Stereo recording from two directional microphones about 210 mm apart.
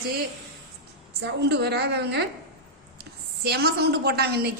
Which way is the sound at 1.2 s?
50° right (ahead or behind).